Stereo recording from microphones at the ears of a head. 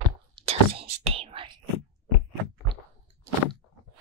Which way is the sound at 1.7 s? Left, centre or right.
Left.